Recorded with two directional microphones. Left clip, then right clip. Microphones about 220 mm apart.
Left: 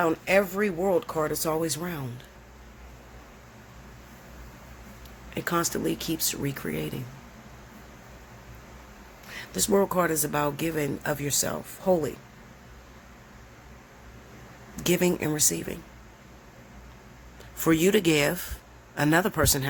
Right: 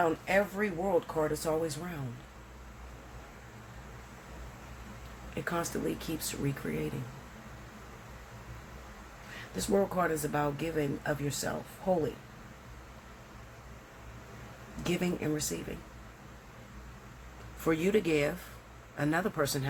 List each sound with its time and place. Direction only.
0.0 s speech: 55° left (ahead or behind)
5.3 s speech: 50° left (ahead or behind)
9.6 s speech: 50° left (ahead or behind)
14.8 s speech: 50° left (ahead or behind)
17.6 s speech: 50° left (ahead or behind)